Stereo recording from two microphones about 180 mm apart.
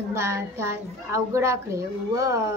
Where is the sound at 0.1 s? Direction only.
15° right (ahead or behind).